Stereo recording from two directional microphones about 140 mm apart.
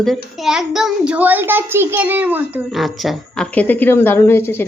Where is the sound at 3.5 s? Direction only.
10° left (ahead or behind).